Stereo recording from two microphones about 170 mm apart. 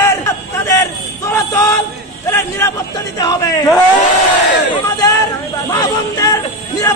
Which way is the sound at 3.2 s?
20° left (ahead or behind).